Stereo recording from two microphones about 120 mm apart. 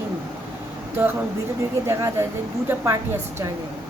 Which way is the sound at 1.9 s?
20° right (ahead or behind).